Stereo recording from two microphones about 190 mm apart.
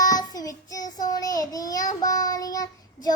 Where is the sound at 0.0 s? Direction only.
20° left (ahead or behind).